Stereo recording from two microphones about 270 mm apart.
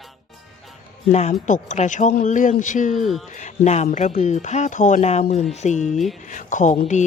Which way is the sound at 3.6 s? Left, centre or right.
Left.